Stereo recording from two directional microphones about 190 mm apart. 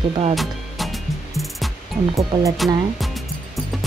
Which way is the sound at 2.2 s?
15° right (ahead or behind).